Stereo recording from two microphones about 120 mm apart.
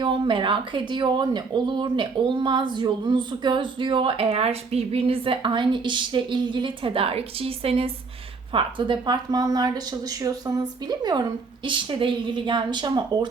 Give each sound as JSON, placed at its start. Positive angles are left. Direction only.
{"t": 0.0, "sound": "speech", "side_deg": -45}
{"t": 8.5, "sound": "speech", "side_deg": -40}